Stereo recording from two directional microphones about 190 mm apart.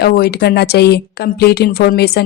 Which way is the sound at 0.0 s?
55° left (ahead or behind).